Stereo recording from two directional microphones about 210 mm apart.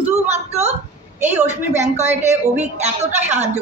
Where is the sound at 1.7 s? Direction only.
35° right (ahead or behind).